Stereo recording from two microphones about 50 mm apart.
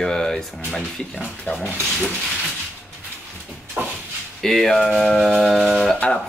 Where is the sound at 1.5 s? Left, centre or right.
Left.